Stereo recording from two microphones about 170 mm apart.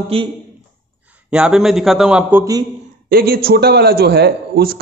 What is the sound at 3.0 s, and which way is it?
A man's voice, 65° right (ahead or behind).